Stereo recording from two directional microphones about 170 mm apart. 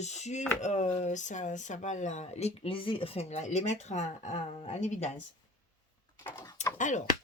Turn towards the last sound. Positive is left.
turn(degrees=45)  # may be behind; listen again after turning